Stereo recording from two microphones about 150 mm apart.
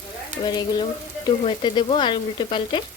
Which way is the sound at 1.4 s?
35° left (ahead or behind).